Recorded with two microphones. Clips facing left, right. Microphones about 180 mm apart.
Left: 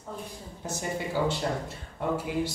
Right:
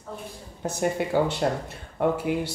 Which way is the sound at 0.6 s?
60° right (ahead or behind).